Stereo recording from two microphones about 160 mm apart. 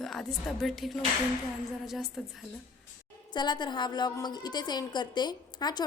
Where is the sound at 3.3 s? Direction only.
25° left (ahead or behind).